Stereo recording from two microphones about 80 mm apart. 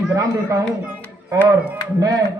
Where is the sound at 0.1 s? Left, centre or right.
Right.